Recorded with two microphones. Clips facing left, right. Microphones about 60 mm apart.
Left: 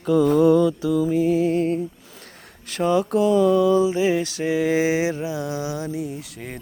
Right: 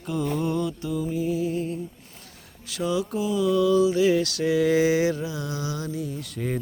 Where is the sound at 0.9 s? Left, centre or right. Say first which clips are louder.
Left 5 dB; left.